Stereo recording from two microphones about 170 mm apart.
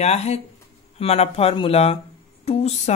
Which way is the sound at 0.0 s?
40° left (ahead or behind).